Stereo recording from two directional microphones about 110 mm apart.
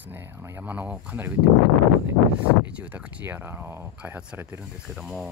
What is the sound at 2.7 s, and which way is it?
Speech, 10° right (ahead or behind).